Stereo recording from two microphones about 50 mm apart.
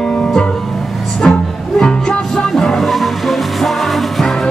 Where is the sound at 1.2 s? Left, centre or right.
Centre.